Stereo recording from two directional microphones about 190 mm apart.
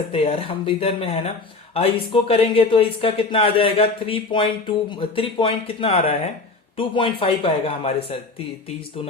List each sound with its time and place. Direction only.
0.1 s speech: 30° left (ahead or behind)